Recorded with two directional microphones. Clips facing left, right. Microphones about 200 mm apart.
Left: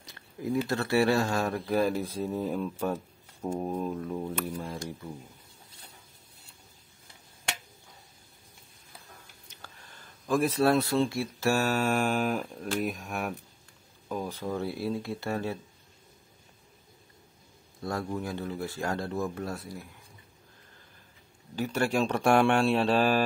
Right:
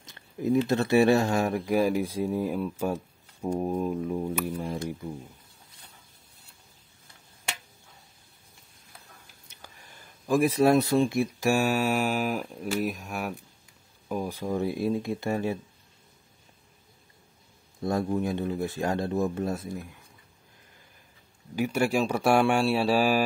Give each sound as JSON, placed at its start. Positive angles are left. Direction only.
{"t": 0.0, "sound": "speech", "side_deg": -25}
{"t": 9.6, "sound": "speech", "side_deg": -15}
{"t": 14.0, "sound": "speech", "side_deg": -10}
{"t": 17.8, "sound": "speech", "side_deg": -20}
{"t": 21.5, "sound": "speech", "side_deg": -10}